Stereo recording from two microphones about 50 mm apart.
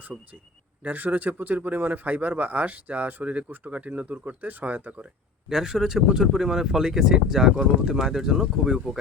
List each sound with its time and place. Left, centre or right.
0.1 s speech: centre
0.9 s speech: right
5.5 s speech: centre